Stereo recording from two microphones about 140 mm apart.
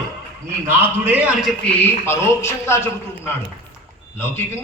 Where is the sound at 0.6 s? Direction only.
15° right (ahead or behind).